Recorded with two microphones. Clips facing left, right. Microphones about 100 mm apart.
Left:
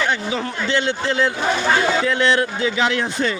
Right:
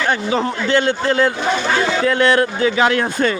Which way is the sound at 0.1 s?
45° right (ahead or behind).